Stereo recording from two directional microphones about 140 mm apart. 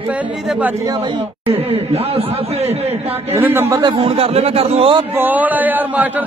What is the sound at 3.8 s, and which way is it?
Speech, 40° right (ahead or behind).